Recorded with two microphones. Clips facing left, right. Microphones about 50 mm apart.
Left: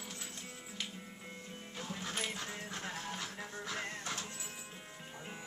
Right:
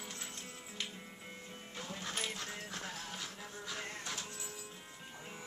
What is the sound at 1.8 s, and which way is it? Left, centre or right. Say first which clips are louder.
Music: left 1 dB; centre.